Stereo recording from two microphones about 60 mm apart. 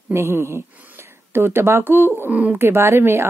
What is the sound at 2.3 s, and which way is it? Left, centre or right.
Speech, right.